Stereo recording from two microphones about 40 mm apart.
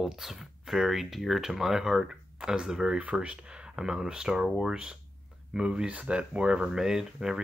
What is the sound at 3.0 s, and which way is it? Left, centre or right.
Speech, right.